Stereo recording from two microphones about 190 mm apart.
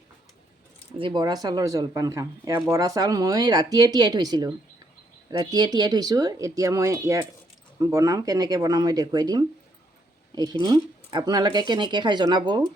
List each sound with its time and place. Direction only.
0.9 s speech: 25° right (ahead or behind)